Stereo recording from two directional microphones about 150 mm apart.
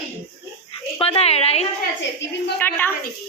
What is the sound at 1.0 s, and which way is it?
Speech, 40° left (ahead or behind).